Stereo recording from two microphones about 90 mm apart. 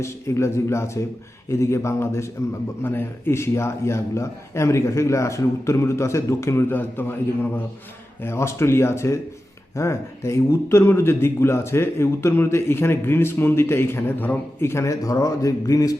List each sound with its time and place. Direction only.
0.0 s a man's voice: 30° left (ahead or behind)
6.7 s speech: 25° left (ahead or behind); by 16.0 s 40° left (ahead or behind)